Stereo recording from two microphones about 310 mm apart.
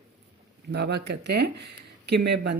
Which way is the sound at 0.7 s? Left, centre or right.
Right.